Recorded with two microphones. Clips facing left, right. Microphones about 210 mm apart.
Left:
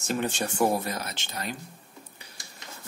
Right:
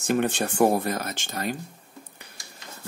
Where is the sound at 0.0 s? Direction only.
55° right (ahead or behind).